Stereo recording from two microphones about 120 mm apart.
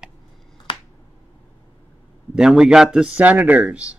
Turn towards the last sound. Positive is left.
turn(degrees=-10)  # may be behind; listen again after turning